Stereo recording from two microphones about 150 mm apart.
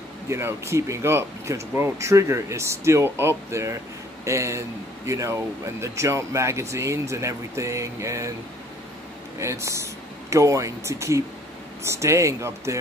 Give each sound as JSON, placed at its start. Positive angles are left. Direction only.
{"t": 0.3, "sound": "speech", "side_deg": -20}
{"t": 9.4, "sound": "speech", "side_deg": -20}